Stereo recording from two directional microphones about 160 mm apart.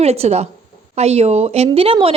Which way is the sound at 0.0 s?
40° right (ahead or behind).